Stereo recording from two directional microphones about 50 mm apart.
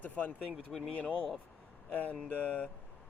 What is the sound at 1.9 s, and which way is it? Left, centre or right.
Speech, left.